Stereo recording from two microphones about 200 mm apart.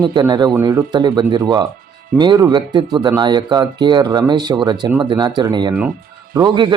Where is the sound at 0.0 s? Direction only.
20° right (ahead or behind).